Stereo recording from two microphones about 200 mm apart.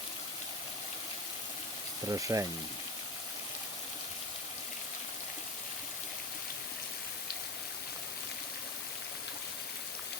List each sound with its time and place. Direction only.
2.0 s speech: 15° right (ahead or behind)